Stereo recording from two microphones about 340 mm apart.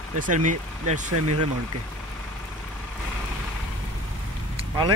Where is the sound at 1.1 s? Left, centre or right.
Right.